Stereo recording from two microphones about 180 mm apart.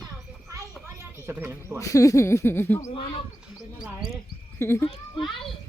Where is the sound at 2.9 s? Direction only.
30° left (ahead or behind).